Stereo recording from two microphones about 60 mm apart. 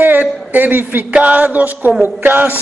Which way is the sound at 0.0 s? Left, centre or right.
Right.